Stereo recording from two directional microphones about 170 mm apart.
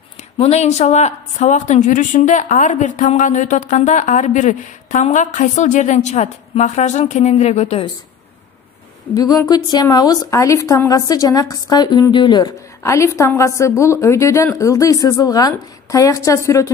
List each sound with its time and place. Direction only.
0.4 s a woman's voice: 40° left (ahead or behind)
9.1 s a woman's voice: 20° left (ahead or behind)